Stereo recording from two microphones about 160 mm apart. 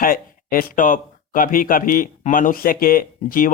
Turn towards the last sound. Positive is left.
turn(degrees=60)  # may be behind; listen again after turning